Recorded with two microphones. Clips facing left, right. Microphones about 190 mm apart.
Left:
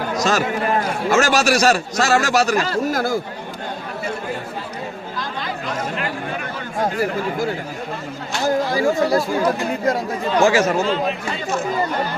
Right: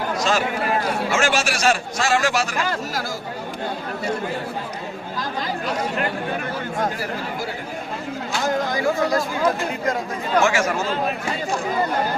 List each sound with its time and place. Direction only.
0.2 s a man's voice: 40° left (ahead or behind)
2.9 s speech: 55° left (ahead or behind)
8.7 s a man's voice: 30° left (ahead or behind)
10.4 s speech: 30° left (ahead or behind)